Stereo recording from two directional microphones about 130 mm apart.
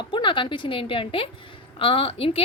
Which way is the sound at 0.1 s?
40° left (ahead or behind).